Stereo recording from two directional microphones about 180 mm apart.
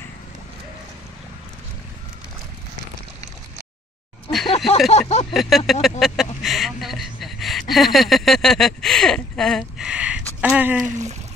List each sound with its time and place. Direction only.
4.5 s a sound: 35° left (ahead or behind)
4.9 s speech: 35° left (ahead or behind)
5.3 s speech: centre (ahead or behind)
10.9 s speech: 40° right (ahead or behind)